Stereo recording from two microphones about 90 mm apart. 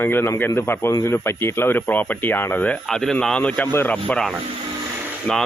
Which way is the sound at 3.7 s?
25° left (ahead or behind).